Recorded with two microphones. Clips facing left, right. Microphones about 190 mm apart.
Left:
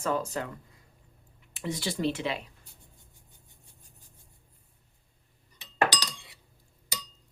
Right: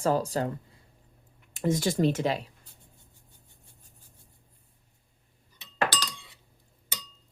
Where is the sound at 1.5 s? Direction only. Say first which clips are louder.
Right 7 dB; 45° right (ahead or behind).